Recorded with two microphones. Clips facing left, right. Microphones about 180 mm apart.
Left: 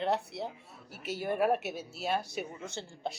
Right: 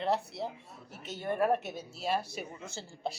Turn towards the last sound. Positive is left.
turn(degrees=0)  # may be behind; listen again after turning